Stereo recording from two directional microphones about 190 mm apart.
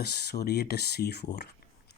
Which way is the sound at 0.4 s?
55° left (ahead or behind).